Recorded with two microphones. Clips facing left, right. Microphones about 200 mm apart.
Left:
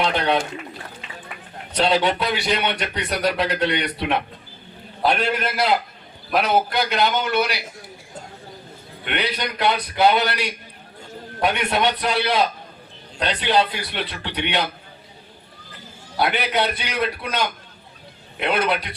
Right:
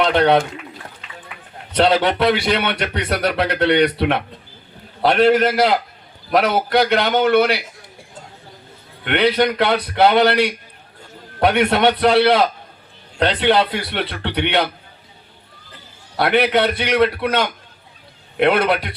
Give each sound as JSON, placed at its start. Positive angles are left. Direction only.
{"t": 0.0, "sound": "speech", "side_deg": -55}
{"t": 1.7, "sound": "a man's voice", "side_deg": -60}
{"t": 5.0, "sound": "a man's voice", "side_deg": -90}
{"t": 9.0, "sound": "a man's voice", "side_deg": -60}
{"t": 16.1, "sound": "a man's voice", "side_deg": -60}